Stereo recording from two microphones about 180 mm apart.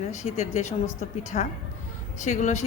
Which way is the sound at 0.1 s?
40° left (ahead or behind).